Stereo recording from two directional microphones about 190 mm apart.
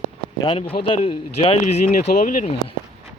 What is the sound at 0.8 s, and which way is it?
Speech, 30° left (ahead or behind).